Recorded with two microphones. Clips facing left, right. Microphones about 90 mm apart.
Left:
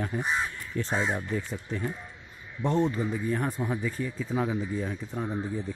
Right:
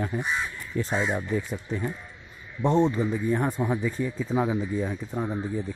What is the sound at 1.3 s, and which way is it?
Speech, 15° right (ahead or behind).